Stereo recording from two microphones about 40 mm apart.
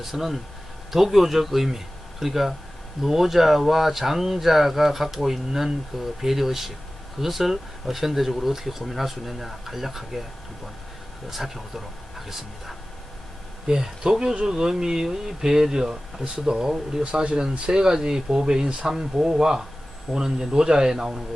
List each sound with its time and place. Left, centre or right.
0.0 s speech: centre
11.3 s speech: centre
17.0 s speech: right